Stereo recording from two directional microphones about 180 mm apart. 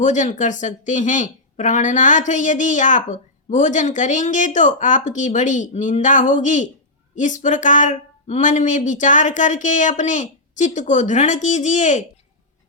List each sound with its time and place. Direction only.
0.0 s speech: 45° left (ahead or behind)